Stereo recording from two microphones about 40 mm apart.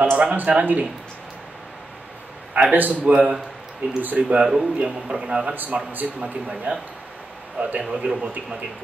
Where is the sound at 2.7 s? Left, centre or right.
Right.